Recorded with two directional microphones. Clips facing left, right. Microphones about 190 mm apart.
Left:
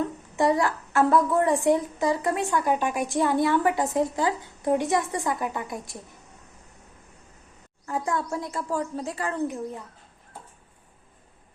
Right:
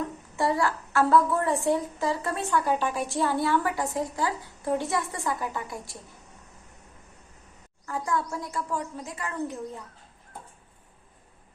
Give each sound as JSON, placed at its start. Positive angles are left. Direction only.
{"t": 0.3, "sound": "a woman's voice", "side_deg": 20}
{"t": 7.9, "sound": "a woman's voice", "side_deg": 20}